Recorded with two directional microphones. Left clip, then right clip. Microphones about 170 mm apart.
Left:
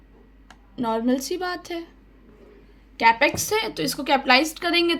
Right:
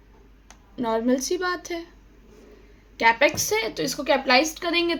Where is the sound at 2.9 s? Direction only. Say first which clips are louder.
Left 1 dB; 5° left (ahead or behind).